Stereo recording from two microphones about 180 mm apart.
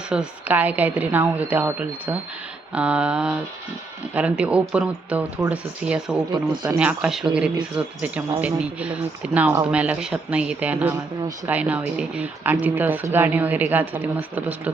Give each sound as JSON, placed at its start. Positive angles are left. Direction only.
{"t": 0.1, "sound": "speech", "side_deg": -5}
{"t": 6.3, "sound": "speech", "side_deg": -25}
{"t": 6.7, "sound": "speech", "side_deg": -5}